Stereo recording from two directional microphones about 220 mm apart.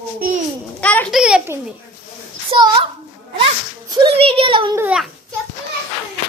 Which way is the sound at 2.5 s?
20° right (ahead or behind).